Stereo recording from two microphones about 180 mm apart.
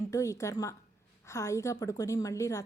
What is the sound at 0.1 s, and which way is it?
A woman's voice, 20° left (ahead or behind).